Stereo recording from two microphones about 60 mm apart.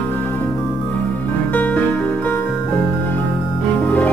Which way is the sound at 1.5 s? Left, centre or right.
Left.